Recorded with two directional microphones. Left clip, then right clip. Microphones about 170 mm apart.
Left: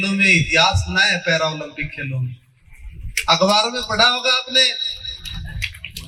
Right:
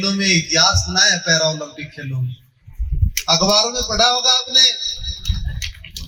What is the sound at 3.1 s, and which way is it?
Speech, 65° right (ahead or behind).